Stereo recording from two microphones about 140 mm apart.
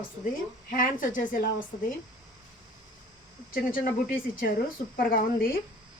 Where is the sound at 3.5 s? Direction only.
90° left.